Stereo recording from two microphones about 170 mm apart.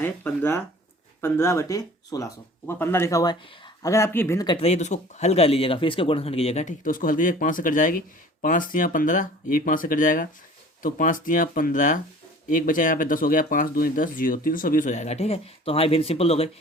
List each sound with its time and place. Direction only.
0.0 s speech: 10° left (ahead or behind)
4.4 s speech: 35° left (ahead or behind)